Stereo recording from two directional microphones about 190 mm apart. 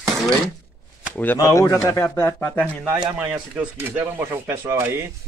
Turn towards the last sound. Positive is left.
turn(degrees=-15)  # may be behind; listen again after turning